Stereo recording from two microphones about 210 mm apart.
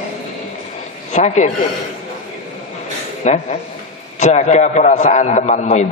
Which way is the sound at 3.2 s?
35° left (ahead or behind).